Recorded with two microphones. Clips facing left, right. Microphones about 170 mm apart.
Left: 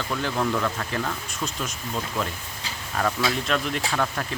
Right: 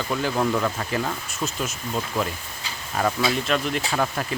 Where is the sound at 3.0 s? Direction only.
10° right (ahead or behind).